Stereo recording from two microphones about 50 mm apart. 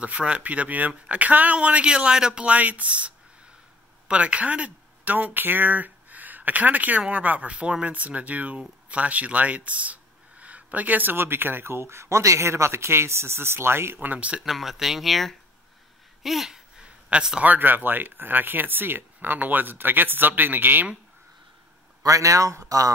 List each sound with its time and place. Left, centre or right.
0.0 s speech: right
14.0 s speech: right
14.4 s speech: centre
16.8 s a sound: centre
17.4 s speech: right
22.1 s a man's voice: right